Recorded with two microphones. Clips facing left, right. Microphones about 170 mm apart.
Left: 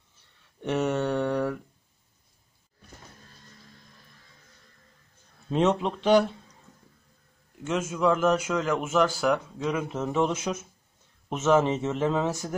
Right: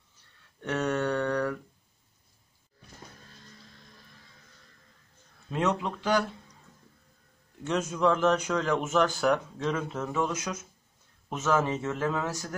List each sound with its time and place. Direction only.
0.6 s a sound: 15° left (ahead or behind)
5.5 s a man's voice: 25° left (ahead or behind)
7.6 s a man's voice: 5° left (ahead or behind); by 12.5 s 20° left (ahead or behind)